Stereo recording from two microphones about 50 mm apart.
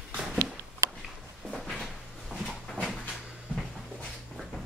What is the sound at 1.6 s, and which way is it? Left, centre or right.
Cupboard open or close, centre.